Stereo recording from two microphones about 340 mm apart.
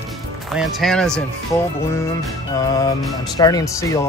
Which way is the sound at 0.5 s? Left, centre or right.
Centre.